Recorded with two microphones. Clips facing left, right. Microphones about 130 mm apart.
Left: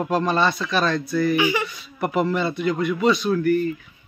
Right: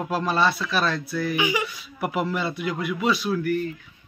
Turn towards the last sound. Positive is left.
turn(degrees=0)  # may be behind; listen again after turning